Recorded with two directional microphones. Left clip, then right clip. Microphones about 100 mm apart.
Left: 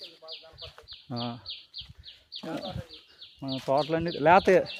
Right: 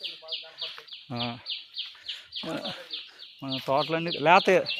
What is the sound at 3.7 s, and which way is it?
Speech, 40° left (ahead or behind).